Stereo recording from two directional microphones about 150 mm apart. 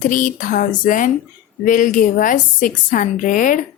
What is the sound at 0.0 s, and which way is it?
Speech, 65° left (ahead or behind).